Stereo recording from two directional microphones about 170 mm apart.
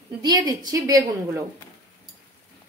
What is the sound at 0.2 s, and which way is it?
A woman's voice, 20° right (ahead or behind).